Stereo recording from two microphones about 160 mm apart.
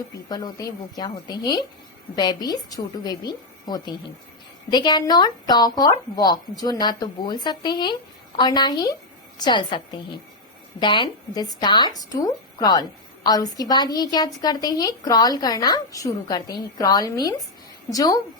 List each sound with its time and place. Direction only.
0.3 s a woman's voice: 25° left (ahead or behind)